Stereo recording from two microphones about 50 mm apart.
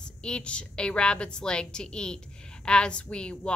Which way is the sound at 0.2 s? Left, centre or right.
Centre.